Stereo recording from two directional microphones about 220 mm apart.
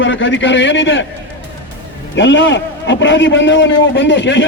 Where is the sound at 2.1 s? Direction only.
55° left (ahead or behind).